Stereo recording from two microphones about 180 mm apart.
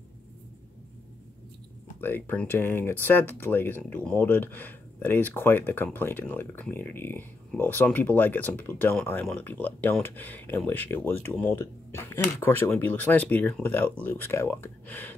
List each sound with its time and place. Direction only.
2.0 s speech: 10° left (ahead or behind)